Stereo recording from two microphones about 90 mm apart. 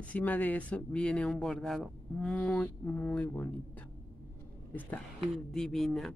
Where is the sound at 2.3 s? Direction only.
15° left (ahead or behind).